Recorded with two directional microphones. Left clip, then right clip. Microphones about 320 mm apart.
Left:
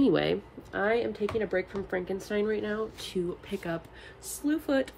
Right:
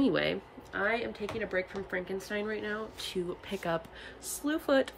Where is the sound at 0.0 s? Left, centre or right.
Centre.